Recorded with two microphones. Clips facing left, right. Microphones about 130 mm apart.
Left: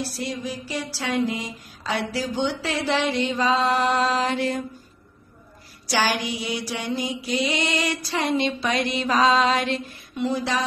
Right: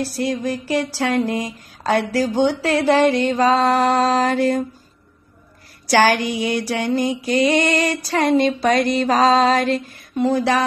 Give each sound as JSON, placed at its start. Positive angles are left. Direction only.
{"t": 0.1, "sound": "mantra", "side_deg": -50}
{"t": 5.9, "sound": "a sound", "side_deg": -55}
{"t": 6.2, "sound": "mantra", "side_deg": 0}
{"t": 6.5, "sound": "mantra", "side_deg": -50}